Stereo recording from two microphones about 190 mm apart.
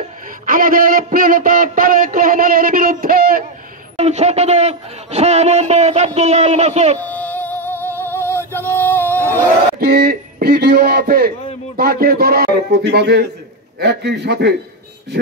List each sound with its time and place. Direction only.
0.5 s a sound: 45° right (ahead or behind)
3.9 s a man's voice: 35° right (ahead or behind)
7.0 s music: 10° left (ahead or behind)
9.8 s a man's voice: 55° right (ahead or behind)